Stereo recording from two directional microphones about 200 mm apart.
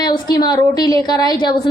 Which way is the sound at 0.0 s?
20° left (ahead or behind).